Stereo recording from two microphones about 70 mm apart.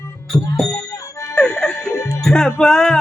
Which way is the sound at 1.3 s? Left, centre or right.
Centre.